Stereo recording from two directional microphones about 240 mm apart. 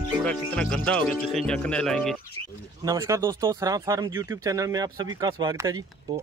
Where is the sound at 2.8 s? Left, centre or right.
Centre.